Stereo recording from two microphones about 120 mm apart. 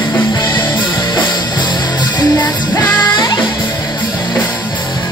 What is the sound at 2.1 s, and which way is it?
Music, 35° left (ahead or behind).